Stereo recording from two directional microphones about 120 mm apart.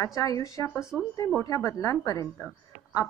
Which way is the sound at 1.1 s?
25° left (ahead or behind).